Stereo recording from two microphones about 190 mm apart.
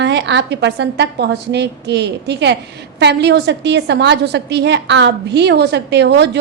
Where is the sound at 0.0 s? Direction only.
65° right (ahead or behind).